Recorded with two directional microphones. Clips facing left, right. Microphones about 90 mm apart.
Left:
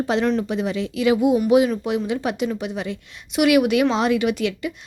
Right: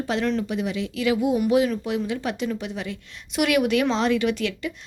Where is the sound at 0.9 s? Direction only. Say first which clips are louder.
Left 5 dB; 20° left (ahead or behind).